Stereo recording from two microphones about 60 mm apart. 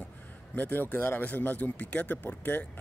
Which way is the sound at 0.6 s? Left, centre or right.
Left.